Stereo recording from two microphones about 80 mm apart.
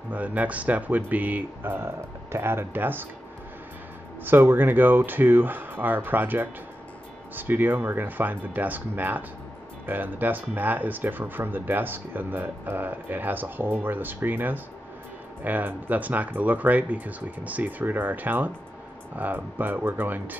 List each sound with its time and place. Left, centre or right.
0.1 s speech: centre
4.2 s speech: right